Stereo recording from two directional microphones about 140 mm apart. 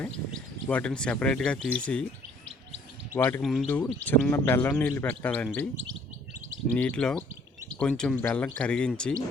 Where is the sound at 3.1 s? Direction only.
20° left (ahead or behind).